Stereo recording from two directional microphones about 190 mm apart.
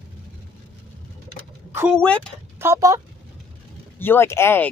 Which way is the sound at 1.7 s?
10° right (ahead or behind).